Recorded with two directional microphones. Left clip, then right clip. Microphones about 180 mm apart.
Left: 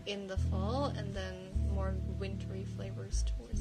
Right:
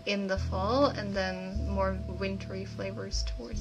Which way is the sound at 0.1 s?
50° left (ahead or behind).